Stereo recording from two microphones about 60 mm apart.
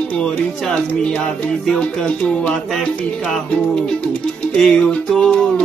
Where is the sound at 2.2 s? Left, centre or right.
Centre.